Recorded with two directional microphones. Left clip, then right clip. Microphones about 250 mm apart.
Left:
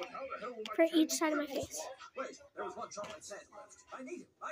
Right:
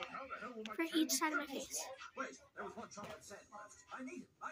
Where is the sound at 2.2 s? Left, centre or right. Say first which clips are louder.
Left 5 dB; right.